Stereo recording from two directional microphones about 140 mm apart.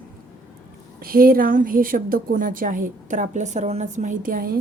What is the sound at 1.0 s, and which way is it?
A woman's voice, 90° right.